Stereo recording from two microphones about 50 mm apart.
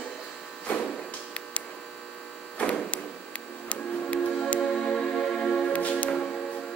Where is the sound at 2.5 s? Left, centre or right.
Left.